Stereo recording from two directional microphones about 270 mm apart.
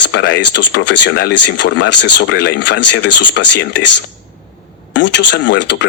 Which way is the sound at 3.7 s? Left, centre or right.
Left.